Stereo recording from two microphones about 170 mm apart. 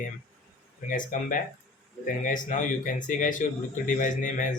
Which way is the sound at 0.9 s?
50° left (ahead or behind).